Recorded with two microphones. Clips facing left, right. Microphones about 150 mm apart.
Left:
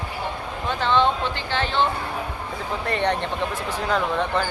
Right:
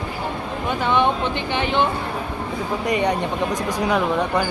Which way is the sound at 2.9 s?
10° right (ahead or behind).